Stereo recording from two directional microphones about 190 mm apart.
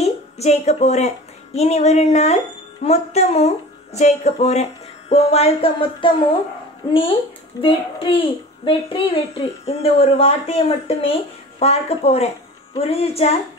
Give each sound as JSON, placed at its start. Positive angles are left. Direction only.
{"t": 0.0, "sound": "a woman's voice", "side_deg": 35}